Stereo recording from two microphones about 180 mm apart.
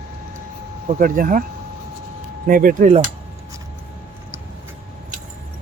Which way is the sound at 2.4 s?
50° right (ahead or behind).